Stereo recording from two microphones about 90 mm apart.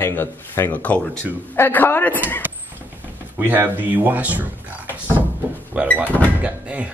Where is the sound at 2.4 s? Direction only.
20° right (ahead or behind).